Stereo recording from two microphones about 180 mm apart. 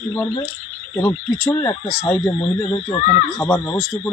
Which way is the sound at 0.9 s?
15° left (ahead or behind).